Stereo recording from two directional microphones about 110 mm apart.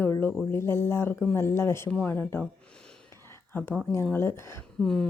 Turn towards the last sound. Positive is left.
turn(degrees=5)  # may be behind; listen again after turning